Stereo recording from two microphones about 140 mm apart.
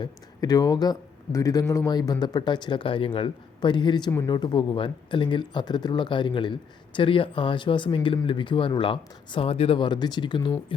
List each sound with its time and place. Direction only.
0.0 s speech: 30° left (ahead or behind)